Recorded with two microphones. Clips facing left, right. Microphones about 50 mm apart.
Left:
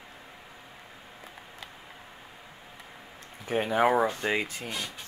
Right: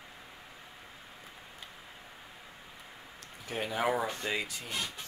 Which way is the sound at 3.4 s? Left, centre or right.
Left.